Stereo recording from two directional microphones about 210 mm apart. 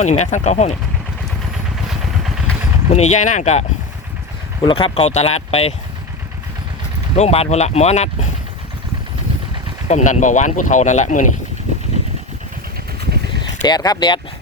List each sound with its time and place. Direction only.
0.0 s speech: 35° left (ahead or behind)
1.7 s vehicle: centre (ahead or behind)
2.9 s speech: 35° left (ahead or behind)
7.2 s speech: 30° left (ahead or behind)
9.9 s speech: 35° left (ahead or behind)
13.6 s speech: 20° left (ahead or behind)